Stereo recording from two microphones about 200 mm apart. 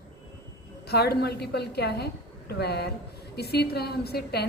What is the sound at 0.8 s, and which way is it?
A woman's voice, 50° left (ahead or behind).